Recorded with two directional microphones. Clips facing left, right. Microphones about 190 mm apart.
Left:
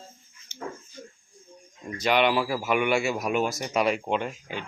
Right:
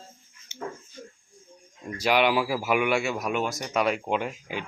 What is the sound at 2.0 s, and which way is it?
Speech, 5° right (ahead or behind).